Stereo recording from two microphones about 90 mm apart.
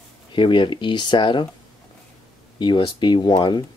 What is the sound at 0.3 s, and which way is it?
Speech, 65° left (ahead or behind).